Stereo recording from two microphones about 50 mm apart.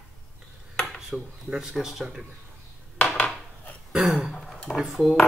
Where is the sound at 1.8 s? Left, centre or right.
Centre.